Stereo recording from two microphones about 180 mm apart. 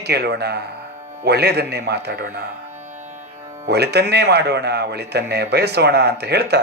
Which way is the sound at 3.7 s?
65° right (ahead or behind).